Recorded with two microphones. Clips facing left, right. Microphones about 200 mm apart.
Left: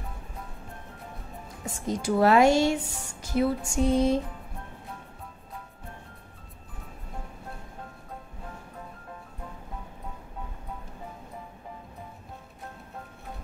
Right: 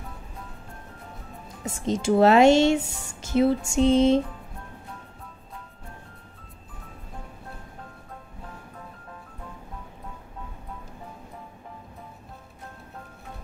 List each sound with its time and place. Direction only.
1.9 s speech: 25° right (ahead or behind)